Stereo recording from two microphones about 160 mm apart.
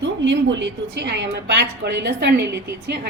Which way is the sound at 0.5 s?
90° right.